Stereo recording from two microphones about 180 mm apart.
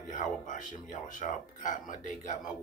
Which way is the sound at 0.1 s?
45° left (ahead or behind).